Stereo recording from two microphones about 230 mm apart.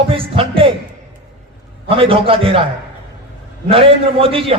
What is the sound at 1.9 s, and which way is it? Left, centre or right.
Music, right.